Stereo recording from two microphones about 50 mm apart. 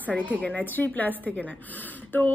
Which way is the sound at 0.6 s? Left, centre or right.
Left.